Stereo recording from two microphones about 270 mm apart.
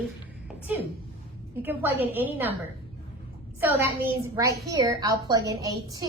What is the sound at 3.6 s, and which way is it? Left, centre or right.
A woman's voice, centre.